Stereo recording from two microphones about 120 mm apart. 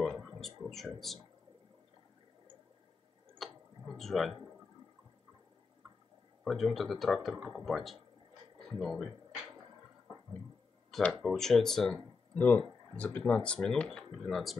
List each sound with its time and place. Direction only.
0.0 s a sound: centre (ahead or behind)
3.4 s tick-tock: centre (ahead or behind)
3.9 s speech: centre (ahead or behind)
6.4 s speech: centre (ahead or behind)
8.5 s a sound: centre (ahead or behind)
11.0 s speech: 5° left (ahead or behind)